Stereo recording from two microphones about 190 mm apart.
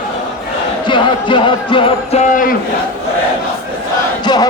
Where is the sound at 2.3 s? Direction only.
45° left (ahead or behind).